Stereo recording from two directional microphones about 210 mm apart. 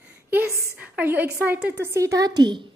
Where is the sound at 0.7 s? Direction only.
10° right (ahead or behind).